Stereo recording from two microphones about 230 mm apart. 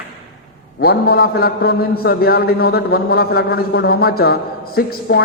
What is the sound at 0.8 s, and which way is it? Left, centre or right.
A man's voice, left.